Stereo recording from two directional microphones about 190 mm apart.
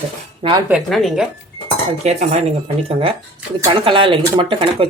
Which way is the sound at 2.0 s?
35° right (ahead or behind).